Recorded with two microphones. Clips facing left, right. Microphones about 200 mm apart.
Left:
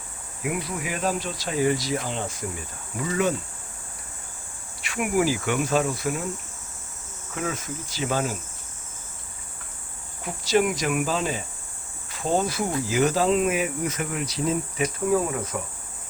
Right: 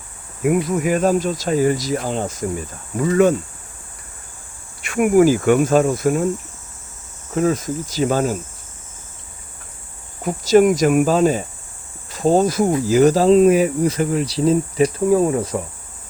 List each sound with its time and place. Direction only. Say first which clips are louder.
0.4 s speech: right 11 dB; 45° right (ahead or behind)
4.8 s speech: right 10 dB; 50° right (ahead or behind)
7.3 s cricket: right 12 dB; 40° right (ahead or behind)
10.2 s speech: right 9 dB; 45° right (ahead or behind)
12.1 s cricket: right 9 dB; 40° right (ahead or behind)